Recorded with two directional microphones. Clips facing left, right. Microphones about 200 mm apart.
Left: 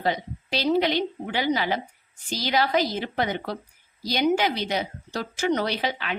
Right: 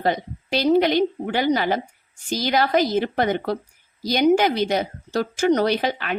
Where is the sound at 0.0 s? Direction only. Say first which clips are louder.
Right 4 dB; 50° right (ahead or behind).